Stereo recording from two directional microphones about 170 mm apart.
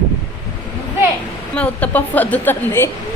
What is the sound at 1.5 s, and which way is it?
Speech, 10° left (ahead or behind).